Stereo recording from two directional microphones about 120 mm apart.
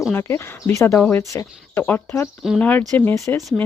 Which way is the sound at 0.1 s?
20° left (ahead or behind).